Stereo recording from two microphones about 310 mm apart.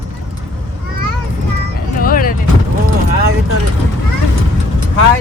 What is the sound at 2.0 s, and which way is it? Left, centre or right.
Speech, left.